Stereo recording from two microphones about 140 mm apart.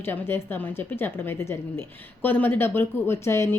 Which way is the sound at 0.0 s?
15° left (ahead or behind).